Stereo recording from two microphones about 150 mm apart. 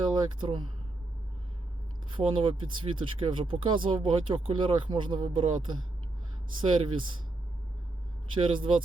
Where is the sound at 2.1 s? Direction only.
35° right (ahead or behind).